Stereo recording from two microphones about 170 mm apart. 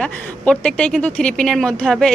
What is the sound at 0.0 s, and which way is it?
Speech, 5° left (ahead or behind).